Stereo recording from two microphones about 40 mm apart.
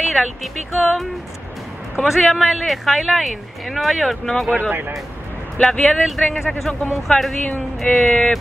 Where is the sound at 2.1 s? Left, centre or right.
Centre.